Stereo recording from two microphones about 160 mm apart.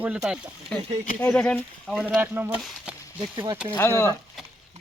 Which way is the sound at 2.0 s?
10° right (ahead or behind).